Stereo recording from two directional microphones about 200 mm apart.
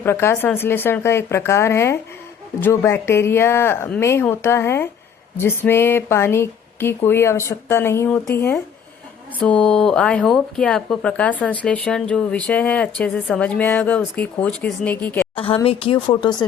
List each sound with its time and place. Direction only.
0.0 s speech: 10° left (ahead or behind)
15.6 s speech: 25° left (ahead or behind)